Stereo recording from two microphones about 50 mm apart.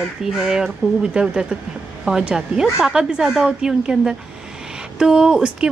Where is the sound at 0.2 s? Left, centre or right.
Centre.